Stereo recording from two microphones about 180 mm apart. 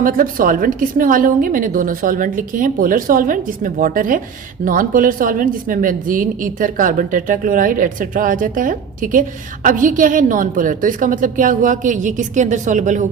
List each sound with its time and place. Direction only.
0.0 s a woman's voice: 50° right (ahead or behind)